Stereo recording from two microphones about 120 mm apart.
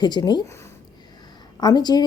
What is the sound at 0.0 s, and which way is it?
Speech, 35° left (ahead or behind).